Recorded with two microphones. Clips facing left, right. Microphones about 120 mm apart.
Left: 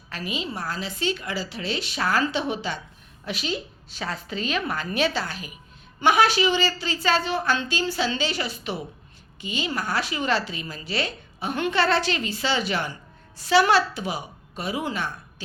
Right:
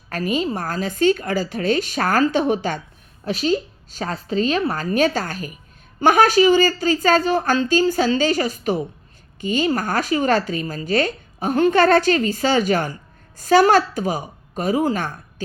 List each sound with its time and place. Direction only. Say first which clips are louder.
0.1 s a woman's voice: right 9 dB; 45° right (ahead or behind)